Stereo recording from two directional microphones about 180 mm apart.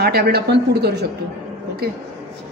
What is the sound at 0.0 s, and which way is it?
Speech, 60° right (ahead or behind).